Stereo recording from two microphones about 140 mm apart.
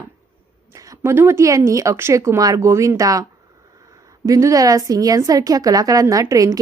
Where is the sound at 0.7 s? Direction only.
25° right (ahead or behind).